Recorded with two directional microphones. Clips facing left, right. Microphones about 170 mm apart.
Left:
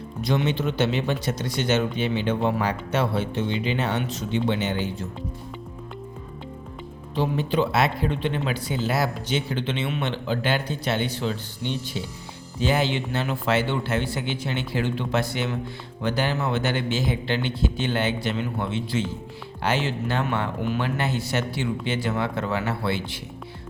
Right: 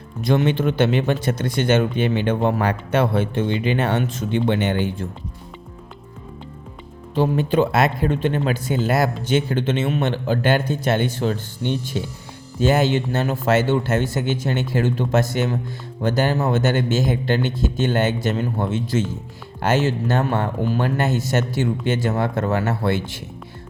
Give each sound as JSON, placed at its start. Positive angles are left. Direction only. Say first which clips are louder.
{"t": 0.2, "sound": "speech", "louder": "right 5 dB", "side_deg": -50}
{"t": 7.2, "sound": "speech", "louder": "right 5 dB", "side_deg": -50}